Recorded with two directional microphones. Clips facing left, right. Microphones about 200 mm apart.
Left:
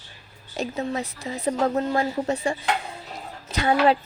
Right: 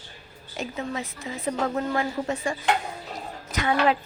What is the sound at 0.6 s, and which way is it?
Speech, 35° left (ahead or behind).